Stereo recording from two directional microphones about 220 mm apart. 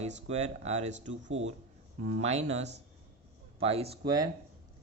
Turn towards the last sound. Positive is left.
turn(degrees=-20)  # may be behind; listen again after turning